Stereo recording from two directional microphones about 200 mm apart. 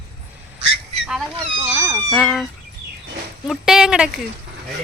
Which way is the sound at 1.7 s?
15° right (ahead or behind).